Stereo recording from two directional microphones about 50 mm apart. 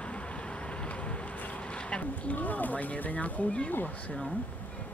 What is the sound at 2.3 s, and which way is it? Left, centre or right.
Speech, left.